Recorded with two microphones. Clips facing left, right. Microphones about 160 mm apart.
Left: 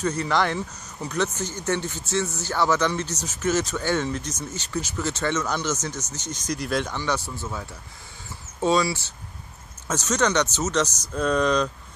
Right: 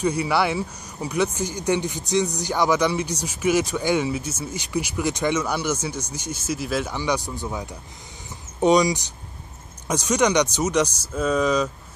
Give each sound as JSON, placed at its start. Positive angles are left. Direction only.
{"t": 0.0, "sound": "speech", "side_deg": -10}